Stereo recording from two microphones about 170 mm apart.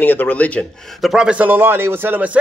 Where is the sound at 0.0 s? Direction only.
10° left (ahead or behind).